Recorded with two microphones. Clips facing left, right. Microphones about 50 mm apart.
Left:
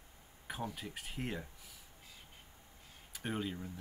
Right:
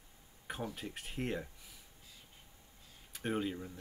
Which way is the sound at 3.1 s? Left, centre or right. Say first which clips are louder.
Right 3 dB; centre.